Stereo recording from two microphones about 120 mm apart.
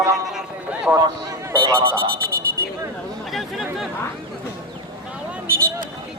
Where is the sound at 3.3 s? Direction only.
Centre (ahead or behind).